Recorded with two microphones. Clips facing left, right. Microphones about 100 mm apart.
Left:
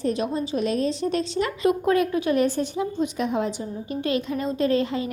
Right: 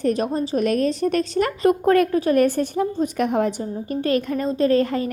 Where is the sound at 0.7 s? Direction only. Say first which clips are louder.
Right 4 dB; 55° right (ahead or behind).